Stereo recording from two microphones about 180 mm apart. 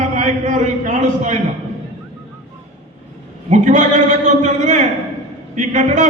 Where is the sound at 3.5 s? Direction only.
45° right (ahead or behind).